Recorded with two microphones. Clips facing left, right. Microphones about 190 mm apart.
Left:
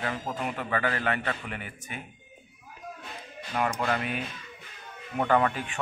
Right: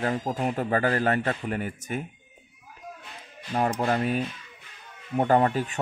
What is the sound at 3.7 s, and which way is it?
A man's voice, 40° right (ahead or behind).